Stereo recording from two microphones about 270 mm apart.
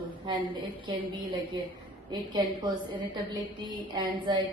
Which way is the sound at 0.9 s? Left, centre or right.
Centre.